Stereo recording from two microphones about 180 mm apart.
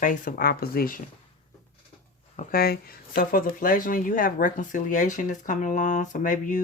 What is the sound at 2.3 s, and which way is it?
Speech, 55° left (ahead or behind).